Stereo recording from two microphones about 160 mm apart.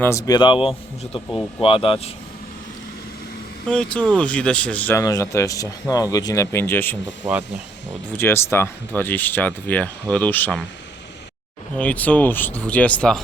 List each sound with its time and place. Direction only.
0.0 s speech: 20° left (ahead or behind)
1.3 s speech: 5° left (ahead or behind)
1.6 s speech: 35° left (ahead or behind)
3.7 s speech: 5° left (ahead or behind)
8.1 s speech: 15° left (ahead or behind)
11.8 s speech: 10° left (ahead or behind)